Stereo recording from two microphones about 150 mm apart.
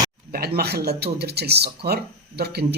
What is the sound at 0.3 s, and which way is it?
Speech, 90° right.